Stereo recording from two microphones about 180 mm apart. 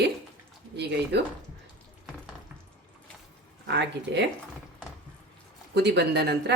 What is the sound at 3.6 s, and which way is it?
Speech, 70° right (ahead or behind).